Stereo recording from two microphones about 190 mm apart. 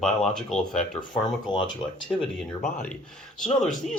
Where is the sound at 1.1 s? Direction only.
25° left (ahead or behind).